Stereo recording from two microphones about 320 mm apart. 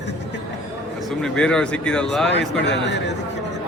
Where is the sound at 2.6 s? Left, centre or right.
Left.